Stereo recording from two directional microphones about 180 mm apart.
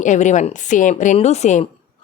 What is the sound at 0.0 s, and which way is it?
Speech, 40° left (ahead or behind).